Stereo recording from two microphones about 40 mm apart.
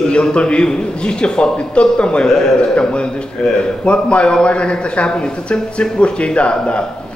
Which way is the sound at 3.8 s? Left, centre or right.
Left.